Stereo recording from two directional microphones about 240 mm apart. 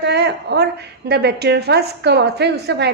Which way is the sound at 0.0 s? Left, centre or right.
Right.